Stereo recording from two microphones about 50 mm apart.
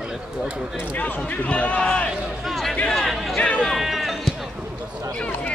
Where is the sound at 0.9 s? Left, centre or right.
Left.